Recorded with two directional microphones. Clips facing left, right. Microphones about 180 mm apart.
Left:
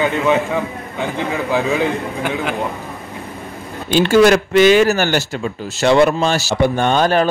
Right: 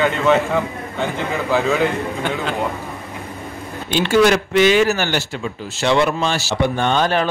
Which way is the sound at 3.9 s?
40° left (ahead or behind).